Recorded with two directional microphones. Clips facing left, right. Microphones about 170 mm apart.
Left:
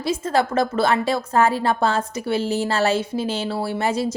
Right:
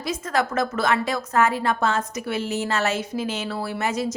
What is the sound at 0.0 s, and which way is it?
A woman's voice, 30° left (ahead or behind).